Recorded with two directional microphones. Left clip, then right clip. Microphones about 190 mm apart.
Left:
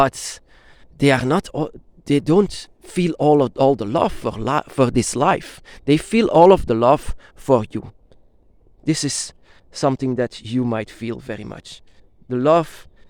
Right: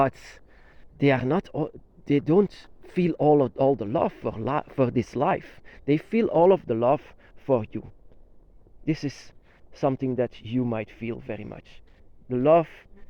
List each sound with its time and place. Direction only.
0.0 s speech: 30° left (ahead or behind); by 7.9 s 50° left (ahead or behind)
9.8 s speech: 50° left (ahead or behind)